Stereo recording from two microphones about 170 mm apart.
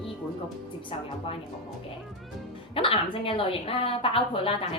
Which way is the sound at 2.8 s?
30° left (ahead or behind).